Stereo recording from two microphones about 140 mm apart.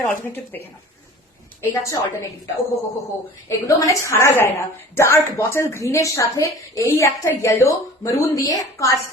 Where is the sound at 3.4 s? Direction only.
20° left (ahead or behind).